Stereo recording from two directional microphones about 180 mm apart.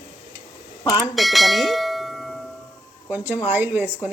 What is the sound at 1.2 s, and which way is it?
Bell, centre (ahead or behind).